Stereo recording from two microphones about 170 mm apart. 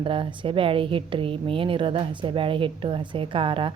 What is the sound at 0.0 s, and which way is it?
A woman's voice, 30° right (ahead or behind).